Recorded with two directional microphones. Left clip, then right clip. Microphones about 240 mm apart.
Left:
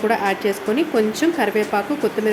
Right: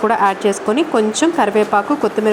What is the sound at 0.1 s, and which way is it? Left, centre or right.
A woman's voice, centre.